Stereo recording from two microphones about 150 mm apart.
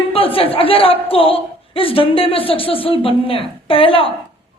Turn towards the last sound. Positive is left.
turn(degrees=35)  # may be behind; listen again after turning